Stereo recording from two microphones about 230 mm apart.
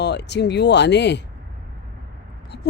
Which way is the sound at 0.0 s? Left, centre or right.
Left.